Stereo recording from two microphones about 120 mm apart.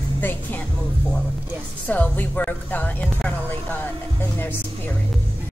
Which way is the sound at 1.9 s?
15° left (ahead or behind).